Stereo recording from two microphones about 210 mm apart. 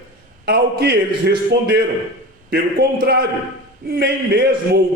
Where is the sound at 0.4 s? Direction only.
50° right (ahead or behind).